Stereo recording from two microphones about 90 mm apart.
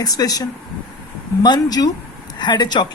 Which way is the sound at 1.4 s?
50° left (ahead or behind).